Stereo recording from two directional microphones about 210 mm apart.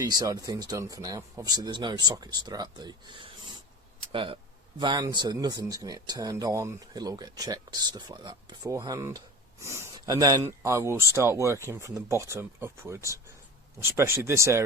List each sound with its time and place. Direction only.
0.0 s speech: 20° right (ahead or behind)